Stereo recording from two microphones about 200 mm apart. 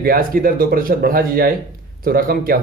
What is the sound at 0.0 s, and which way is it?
Speech, 45° right (ahead or behind).